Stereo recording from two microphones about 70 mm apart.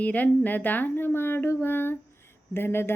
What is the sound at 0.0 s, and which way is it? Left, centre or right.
A woman's voice, left.